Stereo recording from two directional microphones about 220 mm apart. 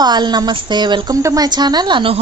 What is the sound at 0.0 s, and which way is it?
A woman's voice, 20° right (ahead or behind).